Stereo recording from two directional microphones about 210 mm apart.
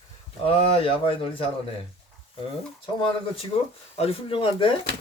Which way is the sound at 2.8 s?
25° left (ahead or behind).